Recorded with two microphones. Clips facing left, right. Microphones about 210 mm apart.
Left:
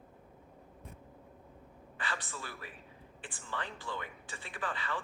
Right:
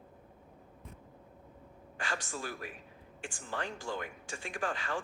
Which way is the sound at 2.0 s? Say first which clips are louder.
Right 3 dB; 45° right (ahead or behind).